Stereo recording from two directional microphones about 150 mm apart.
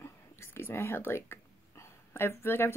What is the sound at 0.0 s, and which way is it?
Whispering, 15° left (ahead or behind).